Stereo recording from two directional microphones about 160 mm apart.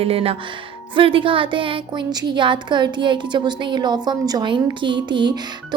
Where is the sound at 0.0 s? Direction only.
35° right (ahead or behind).